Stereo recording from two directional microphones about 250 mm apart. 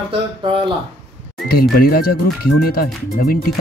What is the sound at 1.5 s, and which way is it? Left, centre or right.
Speech, left.